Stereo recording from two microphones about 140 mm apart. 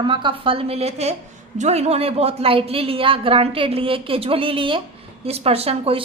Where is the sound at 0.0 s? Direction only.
35° right (ahead or behind).